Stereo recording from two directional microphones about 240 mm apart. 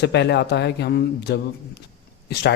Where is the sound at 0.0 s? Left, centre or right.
Left.